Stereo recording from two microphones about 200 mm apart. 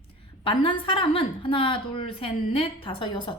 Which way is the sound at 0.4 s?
25° left (ahead or behind).